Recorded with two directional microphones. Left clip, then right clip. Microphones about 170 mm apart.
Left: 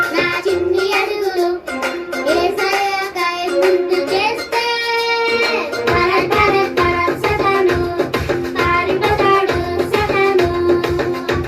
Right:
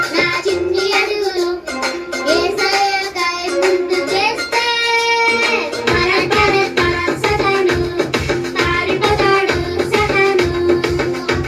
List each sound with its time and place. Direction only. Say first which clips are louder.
0.2 s music: right 1 dB; 30° left (ahead or behind)
5.9 s music: even; 30° left (ahead or behind)